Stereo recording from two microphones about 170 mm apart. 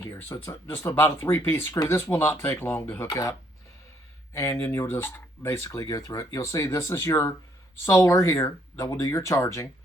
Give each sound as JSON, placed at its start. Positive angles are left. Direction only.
{"t": 0.0, "sound": "speech", "side_deg": 15}
{"t": 4.4, "sound": "speech", "side_deg": 15}